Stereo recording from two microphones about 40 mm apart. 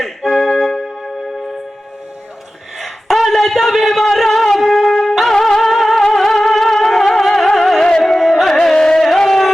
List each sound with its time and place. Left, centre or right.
0.3 s music: centre
2.7 s a sound: centre
5.3 s music: centre
7.8 s music: centre
8.0 s music: centre
8.5 s music: centre